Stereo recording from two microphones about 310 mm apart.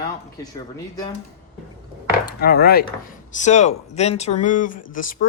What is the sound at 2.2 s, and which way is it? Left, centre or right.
Chopping, left.